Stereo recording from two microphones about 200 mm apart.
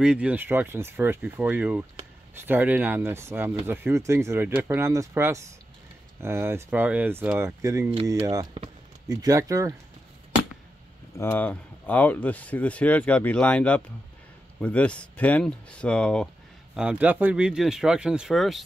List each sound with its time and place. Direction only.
0.0 s speech: 5° right (ahead or behind)
11.1 s speech: 10° left (ahead or behind)
16.7 s speech: 5° right (ahead or behind)